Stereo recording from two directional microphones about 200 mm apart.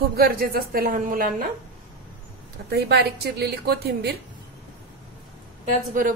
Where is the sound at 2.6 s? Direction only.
55° right (ahead or behind).